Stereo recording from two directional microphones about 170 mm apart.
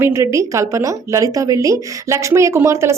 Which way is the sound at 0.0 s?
15° right (ahead or behind).